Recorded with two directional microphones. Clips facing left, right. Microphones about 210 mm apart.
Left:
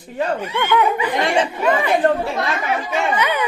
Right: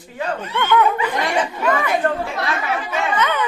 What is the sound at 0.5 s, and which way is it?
Speech, 15° left (ahead or behind).